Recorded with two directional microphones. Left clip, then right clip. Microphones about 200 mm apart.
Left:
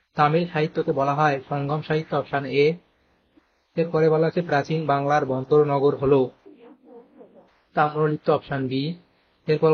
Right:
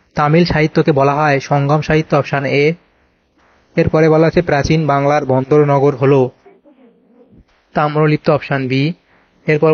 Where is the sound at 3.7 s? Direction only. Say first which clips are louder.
Right 9 dB; 40° right (ahead or behind).